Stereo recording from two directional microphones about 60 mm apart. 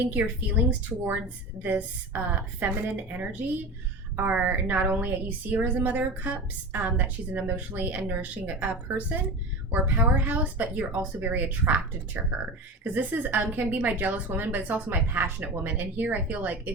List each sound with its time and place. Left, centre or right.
0.0 s a woman's voice: right